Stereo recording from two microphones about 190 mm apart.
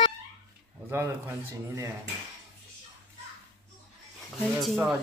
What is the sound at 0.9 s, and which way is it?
Speech, 15° right (ahead or behind).